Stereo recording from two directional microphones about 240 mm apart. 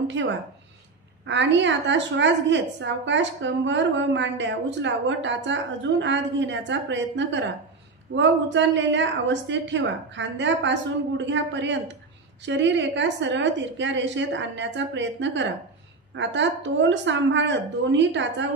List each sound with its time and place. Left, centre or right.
1.2 s a woman's voice: right